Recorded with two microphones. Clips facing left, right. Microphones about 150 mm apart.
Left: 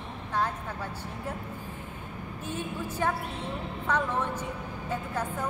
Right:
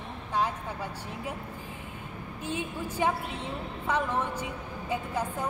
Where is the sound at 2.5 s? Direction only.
10° right (ahead or behind).